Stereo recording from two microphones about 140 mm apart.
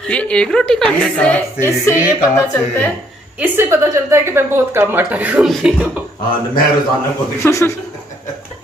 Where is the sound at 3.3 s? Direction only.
15° right (ahead or behind).